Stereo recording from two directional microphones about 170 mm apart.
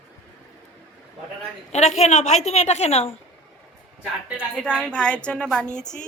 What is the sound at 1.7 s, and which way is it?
A woman's voice, 40° left (ahead or behind).